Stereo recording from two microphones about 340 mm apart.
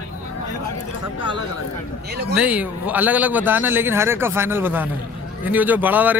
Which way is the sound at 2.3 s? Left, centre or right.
Centre.